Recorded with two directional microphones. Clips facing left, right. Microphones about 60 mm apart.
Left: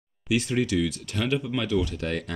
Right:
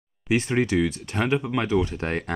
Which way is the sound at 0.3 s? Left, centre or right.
Right.